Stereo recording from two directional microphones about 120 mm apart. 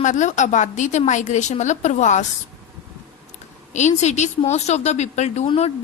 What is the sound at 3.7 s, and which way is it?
Speech, 75° left (ahead or behind).